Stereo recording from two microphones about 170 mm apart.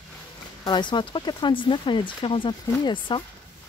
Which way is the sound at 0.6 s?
25° left (ahead or behind).